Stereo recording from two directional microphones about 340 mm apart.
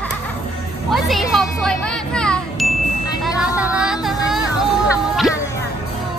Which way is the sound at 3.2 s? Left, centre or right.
Centre.